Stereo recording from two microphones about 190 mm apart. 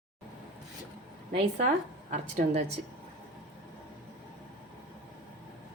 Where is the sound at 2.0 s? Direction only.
35° right (ahead or behind).